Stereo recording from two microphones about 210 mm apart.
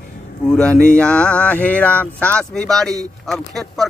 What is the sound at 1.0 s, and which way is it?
Speech, 5° left (ahead or behind).